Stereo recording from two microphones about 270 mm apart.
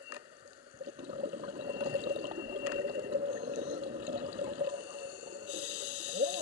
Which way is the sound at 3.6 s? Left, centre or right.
Right.